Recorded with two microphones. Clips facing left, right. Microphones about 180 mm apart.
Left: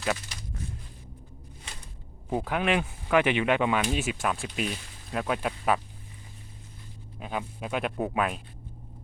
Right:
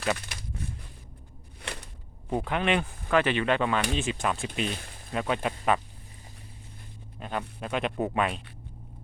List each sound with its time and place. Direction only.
1.6 s a sound: 70° right (ahead or behind)
2.3 s speech: 5° left (ahead or behind)
7.2 s speech: 5° left (ahead or behind)